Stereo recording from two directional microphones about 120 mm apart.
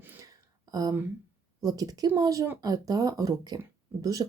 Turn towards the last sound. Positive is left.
turn(degrees=-30)  # may be behind; listen again after turning